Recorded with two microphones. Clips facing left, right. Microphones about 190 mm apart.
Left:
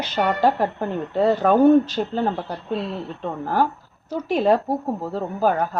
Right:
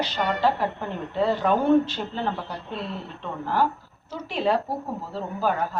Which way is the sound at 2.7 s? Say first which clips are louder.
Left 8 dB; centre (ahead or behind).